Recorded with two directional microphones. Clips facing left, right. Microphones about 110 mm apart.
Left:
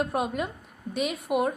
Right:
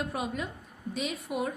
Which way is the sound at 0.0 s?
55° left (ahead or behind).